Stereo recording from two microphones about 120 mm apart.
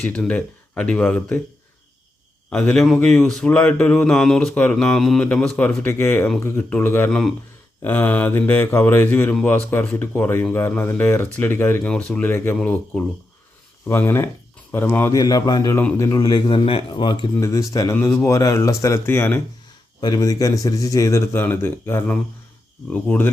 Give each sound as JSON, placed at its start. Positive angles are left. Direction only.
{"t": 0.1, "sound": "speech", "side_deg": 10}
{"t": 2.5, "sound": "a man's voice", "side_deg": 5}
{"t": 13.8, "sound": "a man's voice", "side_deg": 20}
{"t": 15.2, "sound": "speech", "side_deg": 30}
{"t": 15.7, "sound": "a man's voice", "side_deg": 20}
{"t": 16.1, "sound": "speech", "side_deg": 35}
{"t": 16.6, "sound": "speech", "side_deg": 45}
{"t": 17.4, "sound": "a man's voice", "side_deg": 25}
{"t": 20.0, "sound": "a man's voice", "side_deg": 35}